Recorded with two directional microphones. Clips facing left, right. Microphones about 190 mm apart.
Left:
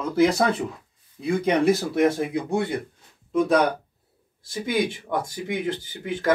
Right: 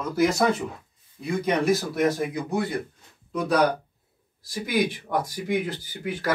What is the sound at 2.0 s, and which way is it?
Speech, 25° left (ahead or behind).